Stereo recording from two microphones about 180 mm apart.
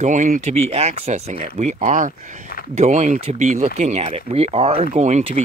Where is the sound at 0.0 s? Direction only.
45° right (ahead or behind).